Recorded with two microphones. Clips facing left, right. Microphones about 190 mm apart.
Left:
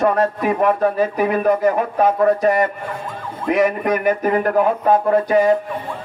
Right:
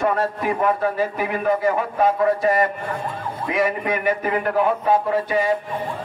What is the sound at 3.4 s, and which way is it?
Speech, 40° left (ahead or behind).